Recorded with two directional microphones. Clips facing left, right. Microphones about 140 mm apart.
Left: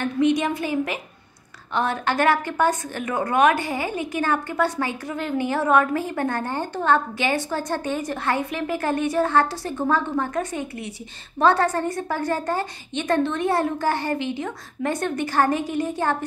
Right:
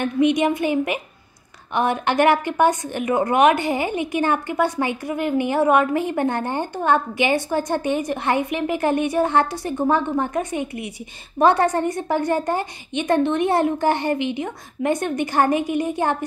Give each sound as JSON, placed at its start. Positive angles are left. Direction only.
{"t": 0.0, "sound": "a woman's voice", "side_deg": -15}